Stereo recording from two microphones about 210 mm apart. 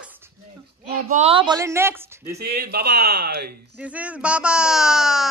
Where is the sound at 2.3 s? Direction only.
45° right (ahead or behind).